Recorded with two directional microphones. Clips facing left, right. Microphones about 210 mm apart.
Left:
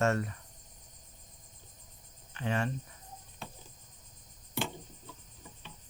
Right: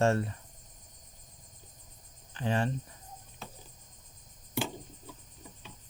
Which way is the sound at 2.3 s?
30° right (ahead or behind).